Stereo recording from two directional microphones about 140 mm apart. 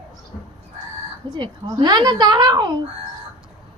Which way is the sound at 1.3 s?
35° right (ahead or behind).